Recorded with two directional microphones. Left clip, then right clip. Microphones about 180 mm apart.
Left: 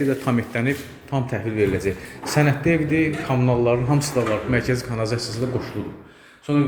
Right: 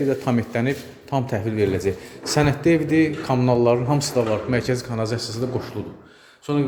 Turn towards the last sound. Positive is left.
turn(degrees=-15)  # may be behind; listen again after turning